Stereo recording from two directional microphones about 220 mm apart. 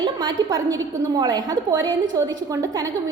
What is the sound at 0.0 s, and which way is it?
A woman's voice, 15° right (ahead or behind).